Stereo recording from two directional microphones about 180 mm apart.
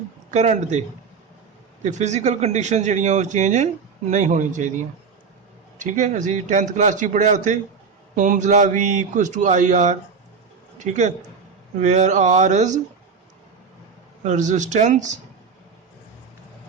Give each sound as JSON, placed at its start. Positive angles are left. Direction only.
{"t": 0.3, "sound": "a man's voice", "side_deg": -40}
{"t": 5.8, "sound": "a man's voice", "side_deg": -45}
{"t": 14.3, "sound": "a man's voice", "side_deg": -45}